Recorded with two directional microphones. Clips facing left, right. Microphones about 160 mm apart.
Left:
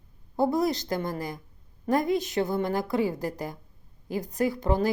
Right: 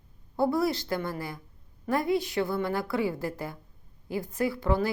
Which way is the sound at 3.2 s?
40° left (ahead or behind).